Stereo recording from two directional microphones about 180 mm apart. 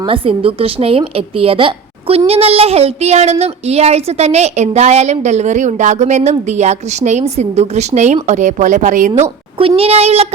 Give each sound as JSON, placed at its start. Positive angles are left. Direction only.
{"t": 0.0, "sound": "a woman's voice", "side_deg": -30}